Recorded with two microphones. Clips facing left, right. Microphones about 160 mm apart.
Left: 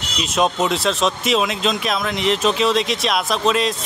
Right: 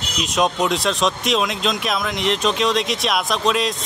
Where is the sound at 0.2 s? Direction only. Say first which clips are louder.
Left 1 dB; centre (ahead or behind).